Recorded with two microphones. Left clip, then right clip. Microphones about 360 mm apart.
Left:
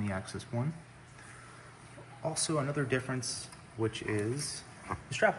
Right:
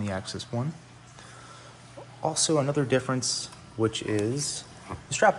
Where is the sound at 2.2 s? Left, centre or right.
Centre.